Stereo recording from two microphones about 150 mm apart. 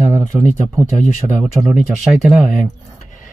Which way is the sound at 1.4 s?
Centre (ahead or behind).